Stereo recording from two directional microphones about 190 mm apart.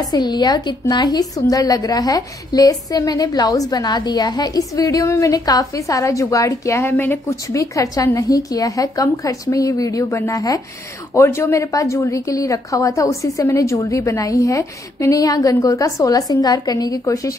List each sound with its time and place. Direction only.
0.1 s a woman's voice: 20° left (ahead or behind)